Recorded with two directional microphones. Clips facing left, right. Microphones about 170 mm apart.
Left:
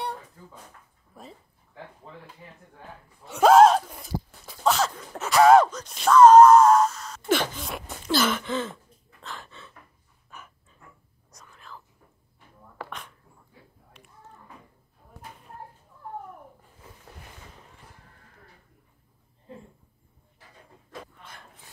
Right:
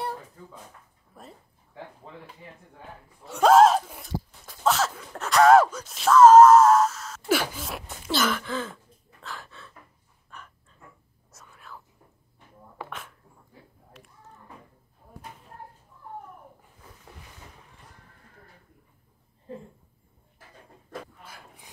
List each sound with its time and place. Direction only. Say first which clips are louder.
1.1 s throat clearing: left 1 dB; centre (ahead or behind)
3.3 s speech: left 1 dB; centre (ahead or behind)
8.5 s throat clearing: left 2 dB; centre (ahead or behind)
9.2 s gasp: even; centre (ahead or behind)
10.3 s pant: even; 5° left (ahead or behind)
11.3 s whispering: even; 5° right (ahead or behind)
21.2 s dog: right 1 dB; 5° right (ahead or behind)